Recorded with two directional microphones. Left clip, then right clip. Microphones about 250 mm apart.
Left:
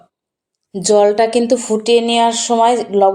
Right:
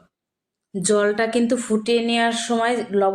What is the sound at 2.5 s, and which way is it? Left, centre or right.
Speech, left.